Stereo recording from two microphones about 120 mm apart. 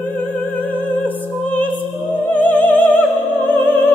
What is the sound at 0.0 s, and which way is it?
Music, 15° left (ahead or behind).